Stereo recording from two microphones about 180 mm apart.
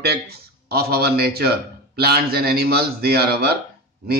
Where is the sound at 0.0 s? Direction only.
60° right (ahead or behind).